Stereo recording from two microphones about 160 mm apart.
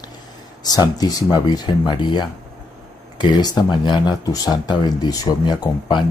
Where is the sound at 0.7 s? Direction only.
25° left (ahead or behind).